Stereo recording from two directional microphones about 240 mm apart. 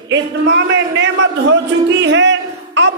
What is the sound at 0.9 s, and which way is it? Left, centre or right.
Speech, right.